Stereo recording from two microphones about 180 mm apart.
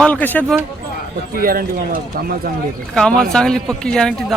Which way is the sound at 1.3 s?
55° right (ahead or behind).